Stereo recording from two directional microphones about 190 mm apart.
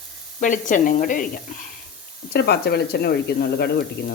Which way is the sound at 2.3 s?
60° left (ahead or behind).